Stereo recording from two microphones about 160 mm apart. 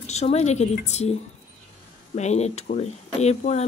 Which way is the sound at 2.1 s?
45° left (ahead or behind).